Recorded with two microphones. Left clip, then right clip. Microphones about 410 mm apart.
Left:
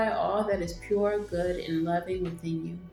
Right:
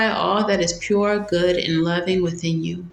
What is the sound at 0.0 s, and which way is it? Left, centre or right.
Speech, left.